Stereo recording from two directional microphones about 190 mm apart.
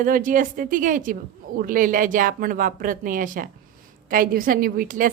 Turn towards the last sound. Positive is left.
turn(degrees=-45)  # may be behind; listen again after turning